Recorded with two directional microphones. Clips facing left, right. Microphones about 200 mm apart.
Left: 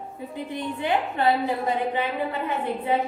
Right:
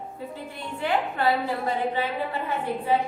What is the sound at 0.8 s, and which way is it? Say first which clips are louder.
Speech: left 1 dB; 20° left (ahead or behind).